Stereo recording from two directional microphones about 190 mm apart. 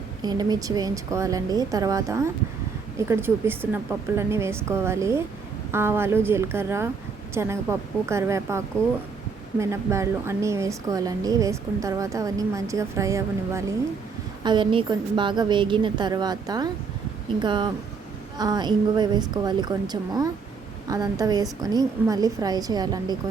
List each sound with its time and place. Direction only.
0.2 s a woman's voice: 20° right (ahead or behind)